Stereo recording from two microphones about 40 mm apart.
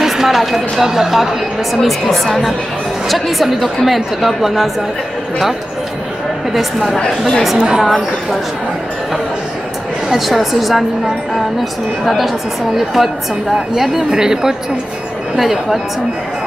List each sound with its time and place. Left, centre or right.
0.0 s a woman's voice: centre
6.5 s speech: centre
7.2 s a woman's voice: centre
7.5 s speech: centre
7.8 s a woman's voice: centre
10.0 s a woman's voice: centre
12.7 s a woman's voice: centre